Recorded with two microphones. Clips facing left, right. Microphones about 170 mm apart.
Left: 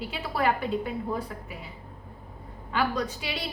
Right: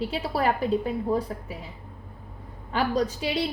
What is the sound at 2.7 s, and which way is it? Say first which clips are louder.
Speech: right 3 dB; 35° right (ahead or behind).